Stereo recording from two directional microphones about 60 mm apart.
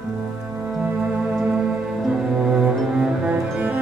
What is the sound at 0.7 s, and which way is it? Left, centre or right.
Music, centre.